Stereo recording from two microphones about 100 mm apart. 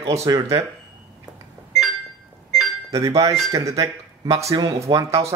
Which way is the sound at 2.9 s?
35° right (ahead or behind).